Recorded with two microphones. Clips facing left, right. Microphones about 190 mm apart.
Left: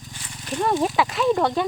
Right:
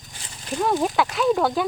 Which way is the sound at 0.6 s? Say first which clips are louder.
Even; centre (ahead or behind).